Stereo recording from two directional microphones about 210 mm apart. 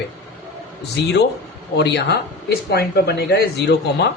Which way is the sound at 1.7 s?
55° left (ahead or behind).